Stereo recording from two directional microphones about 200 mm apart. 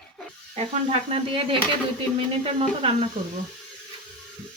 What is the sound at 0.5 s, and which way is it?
Speech, 30° right (ahead or behind).